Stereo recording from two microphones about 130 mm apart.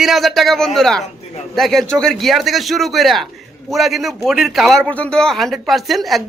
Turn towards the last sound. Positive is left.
turn(degrees=0)  # may be behind; listen again after turning